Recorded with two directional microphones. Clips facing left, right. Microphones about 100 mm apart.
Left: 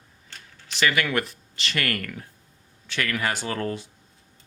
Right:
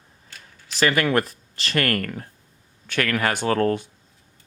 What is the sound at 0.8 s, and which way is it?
Speech, 40° right (ahead or behind).